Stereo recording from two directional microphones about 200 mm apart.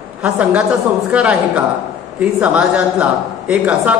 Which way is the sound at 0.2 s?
5° right (ahead or behind).